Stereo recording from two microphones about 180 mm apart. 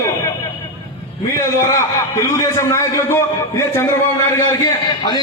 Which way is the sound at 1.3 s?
15° left (ahead or behind).